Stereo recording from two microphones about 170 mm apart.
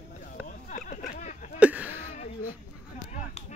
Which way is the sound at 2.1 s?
55° left (ahead or behind).